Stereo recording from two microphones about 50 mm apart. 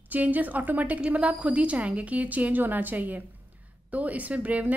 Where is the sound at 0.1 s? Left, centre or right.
Right.